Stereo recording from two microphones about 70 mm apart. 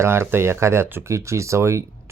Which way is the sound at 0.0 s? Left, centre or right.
Right.